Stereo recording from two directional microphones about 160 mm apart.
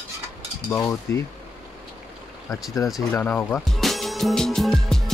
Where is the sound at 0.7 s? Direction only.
15° left (ahead or behind).